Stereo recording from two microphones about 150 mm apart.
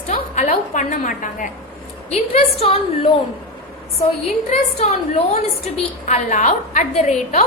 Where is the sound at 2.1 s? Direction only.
45° left (ahead or behind).